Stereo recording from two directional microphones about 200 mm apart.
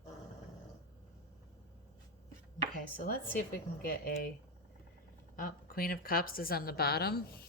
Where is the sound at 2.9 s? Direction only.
45° left (ahead or behind).